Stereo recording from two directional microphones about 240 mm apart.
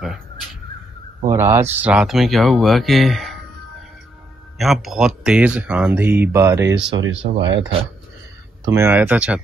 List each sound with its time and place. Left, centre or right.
1.3 s speech: centre
4.6 s speech: centre
6.7 s speech: right
8.6 s speech: centre